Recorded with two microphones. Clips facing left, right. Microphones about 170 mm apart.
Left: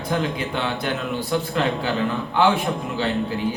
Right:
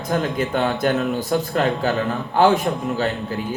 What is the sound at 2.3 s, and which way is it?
Speech, 45° right (ahead or behind).